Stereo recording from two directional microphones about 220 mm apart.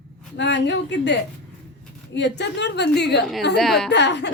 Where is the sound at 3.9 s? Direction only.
50° left (ahead or behind).